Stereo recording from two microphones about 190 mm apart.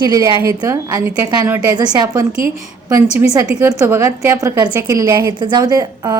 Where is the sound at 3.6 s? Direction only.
15° right (ahead or behind).